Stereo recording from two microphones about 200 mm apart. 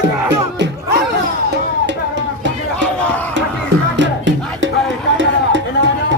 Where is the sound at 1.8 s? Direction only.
60° right (ahead or behind).